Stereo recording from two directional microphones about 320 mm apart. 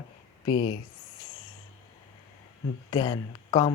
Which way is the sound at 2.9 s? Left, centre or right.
Centre.